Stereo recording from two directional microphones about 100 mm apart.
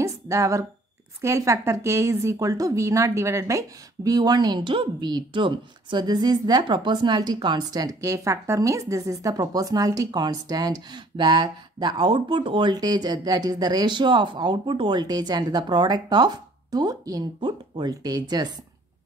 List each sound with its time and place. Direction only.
0.0 s a woman's voice: 30° right (ahead or behind)
17.4 s a woman's voice: 50° right (ahead or behind)